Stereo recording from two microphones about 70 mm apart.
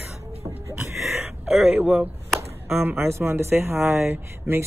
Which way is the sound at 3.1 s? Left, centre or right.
Right.